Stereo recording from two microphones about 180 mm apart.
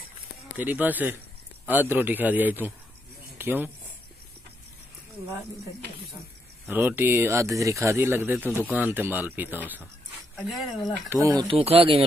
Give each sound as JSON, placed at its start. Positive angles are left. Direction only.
{"t": 0.6, "sound": "speech", "side_deg": -10}
{"t": 6.7, "sound": "speech", "side_deg": -10}
{"t": 11.1, "sound": "speech", "side_deg": -15}
{"t": 11.4, "sound": "speech", "side_deg": -35}